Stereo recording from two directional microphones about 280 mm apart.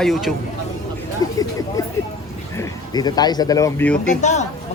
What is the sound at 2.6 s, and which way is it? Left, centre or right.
Speech, centre.